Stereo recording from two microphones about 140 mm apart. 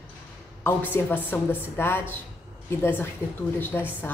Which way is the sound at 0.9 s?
15° left (ahead or behind).